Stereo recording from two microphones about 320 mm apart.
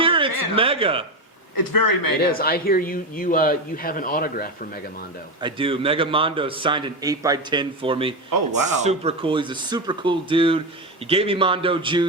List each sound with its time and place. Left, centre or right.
0.0 s a sound: centre
1.5 s speech: left
2.3 s a man's voice: left
5.4 s a man's voice: centre
8.3 s speech: right
8.8 s a man's voice: centre